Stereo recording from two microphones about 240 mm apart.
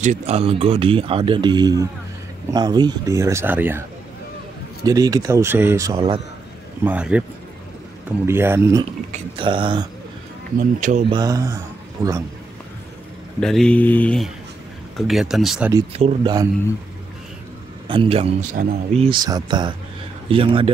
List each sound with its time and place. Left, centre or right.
0.0 s speech: right; by 3.8 s centre
4.8 s speech: centre
6.8 s speech: centre
8.3 s speech: centre
10.8 s speech: right
11.1 s speech: centre
13.4 s speech: centre
15.9 s speech: right
17.8 s speech: right